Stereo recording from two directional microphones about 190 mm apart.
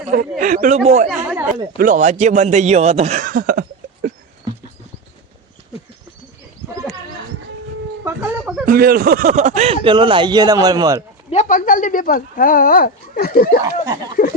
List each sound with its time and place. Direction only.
0.3 s speech: 45° right (ahead or behind)
1.0 s chatter: 5° right (ahead or behind)
1.5 s a man's voice: 45° right (ahead or behind)
8.0 s a sound: 10° right (ahead or behind)
8.6 s speech: 50° right (ahead or behind); by 11.0 s 20° right (ahead or behind)
11.3 s speech: 40° left (ahead or behind)
13.8 s speech: 20° right (ahead or behind)